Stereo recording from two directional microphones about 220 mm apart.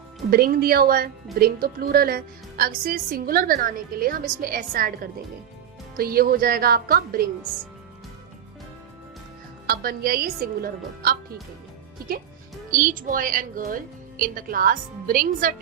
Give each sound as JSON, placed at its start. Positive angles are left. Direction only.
{"t": 0.3, "sound": "a woman's voice", "side_deg": -40}
{"t": 6.0, "sound": "a woman's voice", "side_deg": -45}
{"t": 9.6, "sound": "a woman's voice", "side_deg": -45}
{"t": 12.7, "sound": "a woman's voice", "side_deg": -40}